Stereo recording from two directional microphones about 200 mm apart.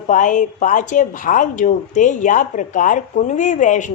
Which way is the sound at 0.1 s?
40° left (ahead or behind).